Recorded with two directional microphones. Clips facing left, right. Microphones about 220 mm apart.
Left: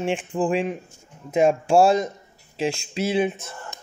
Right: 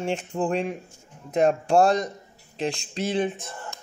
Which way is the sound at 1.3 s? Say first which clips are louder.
Left 2 dB; 5° left (ahead or behind).